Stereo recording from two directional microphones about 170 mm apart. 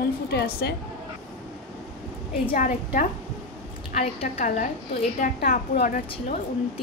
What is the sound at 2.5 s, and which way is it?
A woman's voice, 50° left (ahead or behind).